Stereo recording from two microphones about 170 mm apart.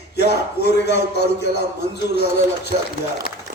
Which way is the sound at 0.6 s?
80° left.